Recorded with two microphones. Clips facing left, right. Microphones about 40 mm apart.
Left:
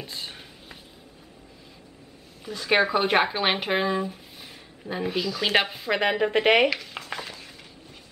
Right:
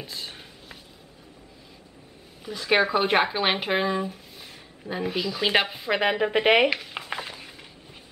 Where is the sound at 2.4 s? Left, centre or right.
Centre.